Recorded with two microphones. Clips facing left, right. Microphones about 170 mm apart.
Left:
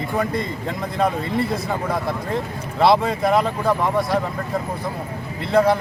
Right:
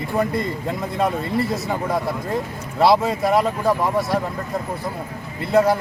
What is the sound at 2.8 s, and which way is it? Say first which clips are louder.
Speech: even; centre (ahead or behind).